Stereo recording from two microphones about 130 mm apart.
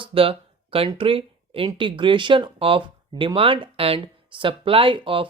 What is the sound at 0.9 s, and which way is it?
Speech, 45° right (ahead or behind).